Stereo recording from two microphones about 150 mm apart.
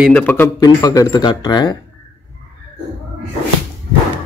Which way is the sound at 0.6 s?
25° left (ahead or behind).